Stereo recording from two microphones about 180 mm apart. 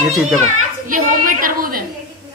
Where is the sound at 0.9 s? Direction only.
50° right (ahead or behind).